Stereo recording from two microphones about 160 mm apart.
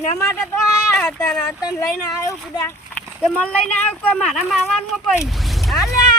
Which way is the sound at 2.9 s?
5° left (ahead or behind).